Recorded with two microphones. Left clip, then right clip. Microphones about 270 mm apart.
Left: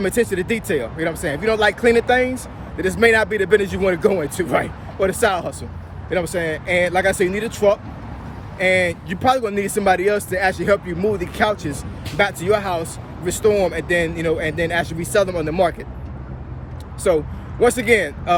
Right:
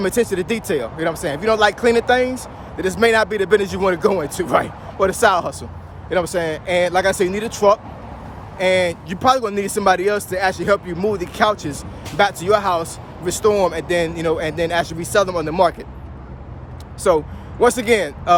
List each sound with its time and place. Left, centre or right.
0.0 s speech: centre
17.0 s speech: centre